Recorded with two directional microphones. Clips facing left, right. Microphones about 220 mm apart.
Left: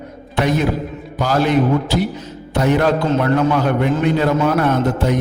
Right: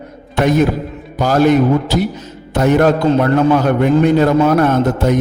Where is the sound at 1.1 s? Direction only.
45° right (ahead or behind).